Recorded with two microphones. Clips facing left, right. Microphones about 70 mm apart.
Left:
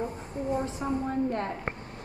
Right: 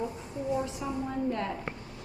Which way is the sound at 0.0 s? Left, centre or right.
Left.